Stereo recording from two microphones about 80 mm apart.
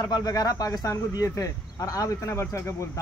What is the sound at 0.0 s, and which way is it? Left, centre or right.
A man's voice, left.